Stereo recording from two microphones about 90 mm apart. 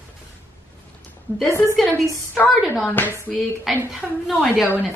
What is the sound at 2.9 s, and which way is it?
Speech, 25° left (ahead or behind).